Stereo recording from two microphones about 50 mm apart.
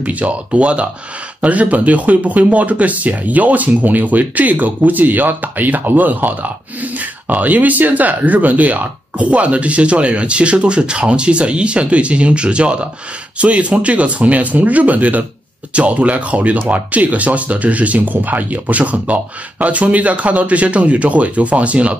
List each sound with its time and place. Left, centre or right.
0.0 s speech: right